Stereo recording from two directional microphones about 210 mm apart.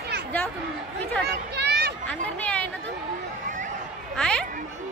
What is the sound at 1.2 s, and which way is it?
Children playing, 50° right (ahead or behind).